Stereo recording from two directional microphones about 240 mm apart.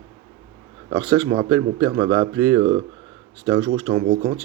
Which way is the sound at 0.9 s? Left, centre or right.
Right.